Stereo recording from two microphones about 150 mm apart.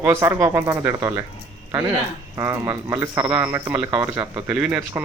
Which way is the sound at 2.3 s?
20° right (ahead or behind).